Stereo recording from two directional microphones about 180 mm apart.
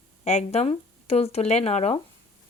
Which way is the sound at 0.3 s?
35° left (ahead or behind).